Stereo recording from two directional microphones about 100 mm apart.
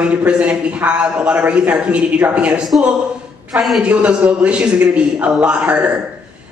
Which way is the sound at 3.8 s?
10° right (ahead or behind).